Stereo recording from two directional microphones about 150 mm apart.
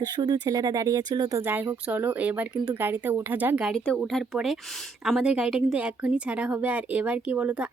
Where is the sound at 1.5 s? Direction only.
10° right (ahead or behind).